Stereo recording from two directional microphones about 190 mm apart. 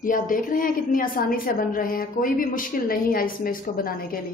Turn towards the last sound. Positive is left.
turn(degrees=50)  # may be behind; listen again after turning